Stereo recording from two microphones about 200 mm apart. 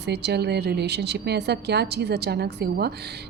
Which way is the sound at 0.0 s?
55° right (ahead or behind).